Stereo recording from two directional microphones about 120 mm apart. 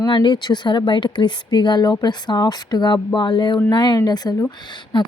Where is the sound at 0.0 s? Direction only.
40° left (ahead or behind).